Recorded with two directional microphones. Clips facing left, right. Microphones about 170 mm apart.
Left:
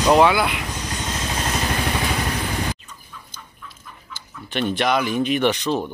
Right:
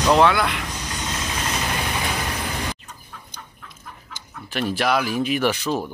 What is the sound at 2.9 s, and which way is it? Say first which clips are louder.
Chicken: right 1 dB; 55° right (ahead or behind).